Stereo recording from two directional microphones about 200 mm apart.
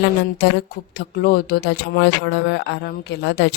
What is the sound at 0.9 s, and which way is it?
Speech, 50° left (ahead or behind).